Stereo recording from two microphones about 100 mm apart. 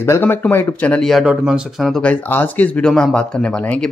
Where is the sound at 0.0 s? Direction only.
25° left (ahead or behind).